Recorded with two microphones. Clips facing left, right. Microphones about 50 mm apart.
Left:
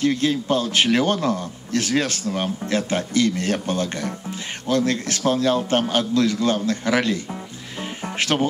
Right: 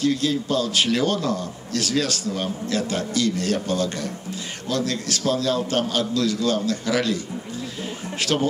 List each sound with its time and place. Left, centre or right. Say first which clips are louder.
0.0 s a man's voice: left 1 dB; left
8.2 s a man's voice: left 2 dB; left